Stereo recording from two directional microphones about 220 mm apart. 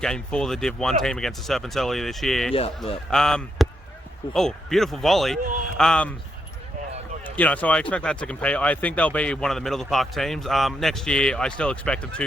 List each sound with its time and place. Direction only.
0.0 s speech: 5° left (ahead or behind)
2.5 s speech: 25° left (ahead or behind)
3.1 s speech: 5° left (ahead or behind)
7.3 s speech: 5° left (ahead or behind)